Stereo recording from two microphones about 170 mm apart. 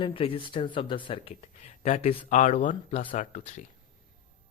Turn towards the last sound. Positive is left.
turn(degrees=45)  # may be behind; listen again after turning